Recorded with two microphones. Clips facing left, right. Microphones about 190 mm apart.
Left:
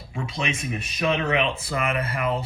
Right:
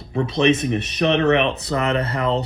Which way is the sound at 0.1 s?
40° right (ahead or behind).